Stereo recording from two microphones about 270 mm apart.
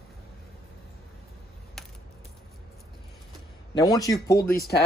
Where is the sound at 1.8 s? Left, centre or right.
Centre.